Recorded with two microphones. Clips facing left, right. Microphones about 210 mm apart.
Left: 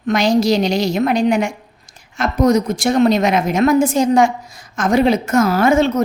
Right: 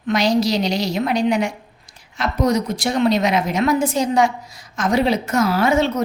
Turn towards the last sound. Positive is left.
turn(degrees=45)  # may be behind; listen again after turning